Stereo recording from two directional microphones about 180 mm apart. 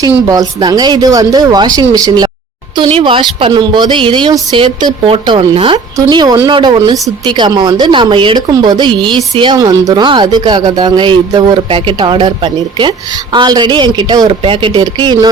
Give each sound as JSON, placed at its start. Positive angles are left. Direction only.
{"t": 0.3, "sound": "a woman's voice", "side_deg": -20}